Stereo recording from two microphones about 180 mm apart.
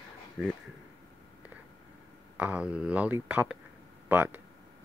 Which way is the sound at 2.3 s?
5° right (ahead or behind).